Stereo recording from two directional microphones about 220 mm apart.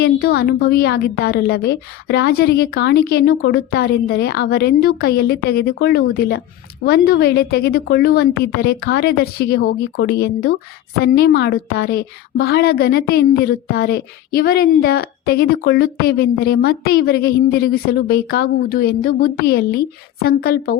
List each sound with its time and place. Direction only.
0.0 s speech: 45° left (ahead or behind)